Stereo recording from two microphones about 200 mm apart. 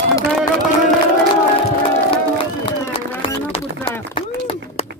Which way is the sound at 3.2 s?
25° left (ahead or behind).